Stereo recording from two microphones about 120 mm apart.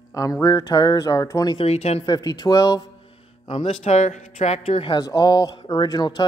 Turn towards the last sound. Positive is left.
turn(degrees=35)  # may be behind; listen again after turning